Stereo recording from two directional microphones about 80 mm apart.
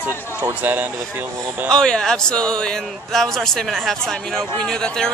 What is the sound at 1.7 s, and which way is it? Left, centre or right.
Speech, centre.